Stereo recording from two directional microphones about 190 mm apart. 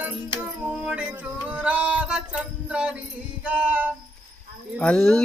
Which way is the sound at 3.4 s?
5° right (ahead or behind).